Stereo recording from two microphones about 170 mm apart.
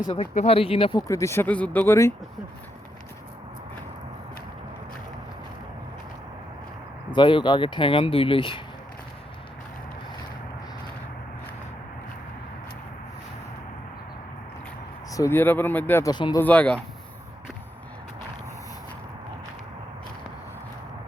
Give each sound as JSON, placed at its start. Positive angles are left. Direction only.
{"t": 0.2, "sound": "speech", "side_deg": 35}
{"t": 7.1, "sound": "speech", "side_deg": 30}
{"t": 15.1, "sound": "speech", "side_deg": 15}
{"t": 16.1, "sound": "speech", "side_deg": 25}
{"t": 16.4, "sound": "speech", "side_deg": 10}